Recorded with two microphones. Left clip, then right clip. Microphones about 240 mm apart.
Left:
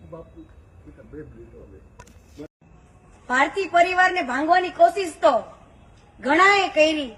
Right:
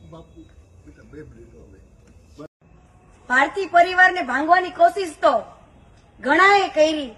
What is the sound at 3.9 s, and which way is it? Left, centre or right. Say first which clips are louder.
Speech: right 3 dB; centre.